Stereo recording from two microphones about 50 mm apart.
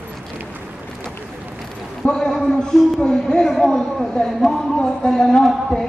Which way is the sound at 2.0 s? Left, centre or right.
Centre.